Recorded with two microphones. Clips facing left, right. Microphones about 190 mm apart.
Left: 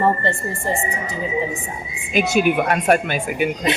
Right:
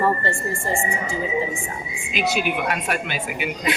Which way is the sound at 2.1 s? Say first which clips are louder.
Left 6 dB; 50° left (ahead or behind).